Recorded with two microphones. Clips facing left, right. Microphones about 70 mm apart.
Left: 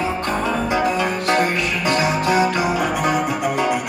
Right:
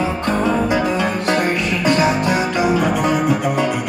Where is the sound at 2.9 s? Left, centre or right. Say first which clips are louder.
Right 3 dB; left.